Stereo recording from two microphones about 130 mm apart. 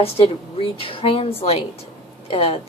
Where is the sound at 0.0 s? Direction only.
50° left (ahead or behind).